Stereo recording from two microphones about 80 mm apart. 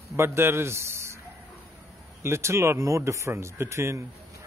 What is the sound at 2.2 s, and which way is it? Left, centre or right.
Speech, right.